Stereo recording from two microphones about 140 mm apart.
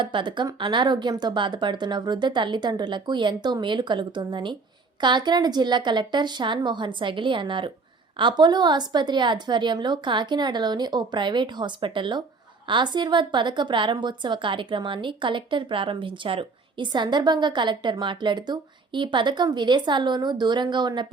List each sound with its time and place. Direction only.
0.0 s a woman's voice: 35° right (ahead or behind)